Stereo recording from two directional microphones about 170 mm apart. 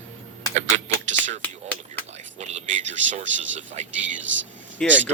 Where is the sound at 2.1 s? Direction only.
40° right (ahead or behind).